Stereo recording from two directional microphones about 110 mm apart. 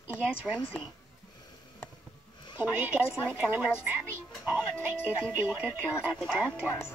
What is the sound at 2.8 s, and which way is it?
Speech, 15° right (ahead or behind).